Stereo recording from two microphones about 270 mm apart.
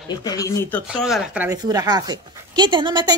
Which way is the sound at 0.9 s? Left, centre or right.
Centre.